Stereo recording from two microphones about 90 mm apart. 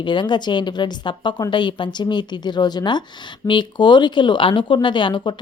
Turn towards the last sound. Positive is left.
turn(degrees=60)  # may be behind; listen again after turning